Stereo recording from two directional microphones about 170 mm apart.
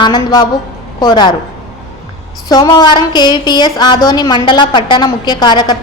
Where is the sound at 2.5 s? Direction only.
25° left (ahead or behind).